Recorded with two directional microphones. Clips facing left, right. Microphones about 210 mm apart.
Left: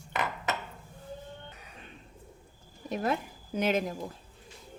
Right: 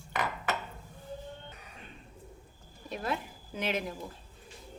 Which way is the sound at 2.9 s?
45° left (ahead or behind).